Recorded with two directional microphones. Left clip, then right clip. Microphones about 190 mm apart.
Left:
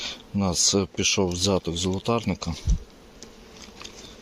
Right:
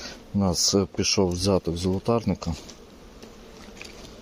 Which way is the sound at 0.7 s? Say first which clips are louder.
Even; 5° right (ahead or behind).